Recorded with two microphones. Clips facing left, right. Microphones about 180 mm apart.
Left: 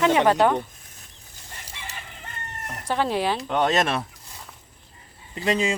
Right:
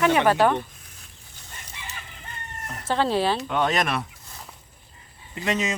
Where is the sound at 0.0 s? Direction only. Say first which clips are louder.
Left 1 dB; 20° left (ahead or behind).